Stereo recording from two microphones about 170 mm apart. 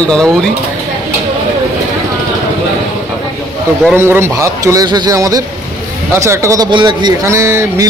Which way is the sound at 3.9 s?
15° right (ahead or behind).